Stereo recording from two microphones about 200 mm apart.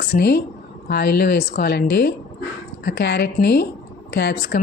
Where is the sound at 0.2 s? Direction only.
55° left (ahead or behind).